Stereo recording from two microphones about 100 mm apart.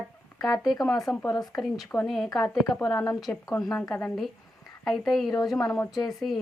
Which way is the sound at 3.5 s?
40° left (ahead or behind).